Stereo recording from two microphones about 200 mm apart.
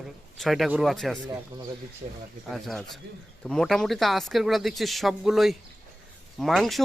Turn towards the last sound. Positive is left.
turn(degrees=0)  # may be behind; listen again after turning